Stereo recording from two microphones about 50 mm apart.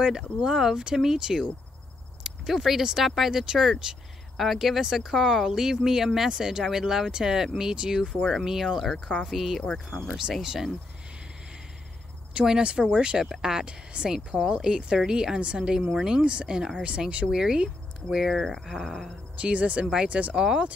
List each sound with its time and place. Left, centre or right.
0.4 s speech: centre
8.3 s speech: centre
12.4 s speech: centre
19.3 s speech: right
20.3 s speech: centre